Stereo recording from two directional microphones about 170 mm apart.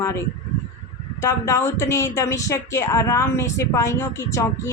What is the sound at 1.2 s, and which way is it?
Speech, 20° left (ahead or behind).